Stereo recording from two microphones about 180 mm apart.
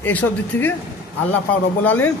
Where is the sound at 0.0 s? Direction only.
10° left (ahead or behind).